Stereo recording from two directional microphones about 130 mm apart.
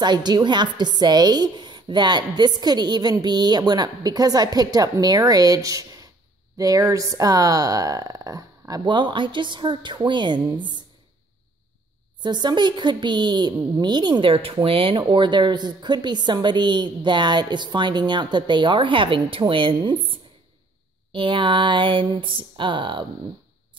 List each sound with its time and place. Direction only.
0.0 s a woman's voice: 35° right (ahead or behind)
12.2 s a woman's voice: 35° right (ahead or behind)